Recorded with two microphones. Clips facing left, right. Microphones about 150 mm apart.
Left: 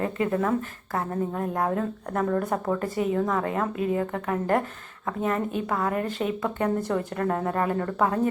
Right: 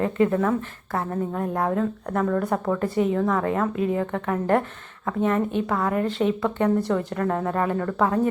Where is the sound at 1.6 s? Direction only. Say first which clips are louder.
Right 3 dB; 25° left (ahead or behind).